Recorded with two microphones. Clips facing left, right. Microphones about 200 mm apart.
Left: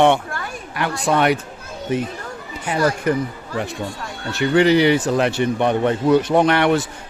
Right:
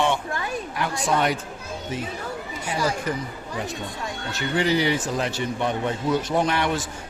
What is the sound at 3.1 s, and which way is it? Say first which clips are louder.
Speech: left 8 dB; 60° left (ahead or behind).